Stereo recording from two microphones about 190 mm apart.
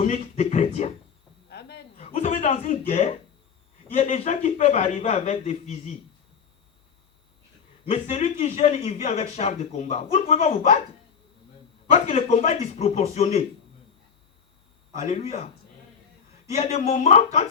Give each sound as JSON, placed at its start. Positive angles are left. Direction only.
{"t": 0.0, "sound": "speech", "side_deg": 35}
{"t": 1.5, "sound": "cricket", "side_deg": 60}
{"t": 2.0, "sound": "a sound", "side_deg": 35}
{"t": 3.9, "sound": "speech", "side_deg": 35}
{"t": 7.9, "sound": "speech", "side_deg": 35}
{"t": 11.9, "sound": "speech", "side_deg": 35}
{"t": 15.0, "sound": "speech", "side_deg": 35}
{"t": 16.6, "sound": "speech", "side_deg": 35}